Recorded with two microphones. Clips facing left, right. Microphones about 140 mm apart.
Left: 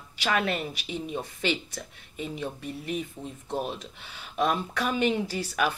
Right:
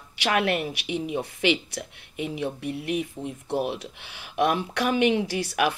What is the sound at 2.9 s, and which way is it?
Speech, 15° right (ahead or behind).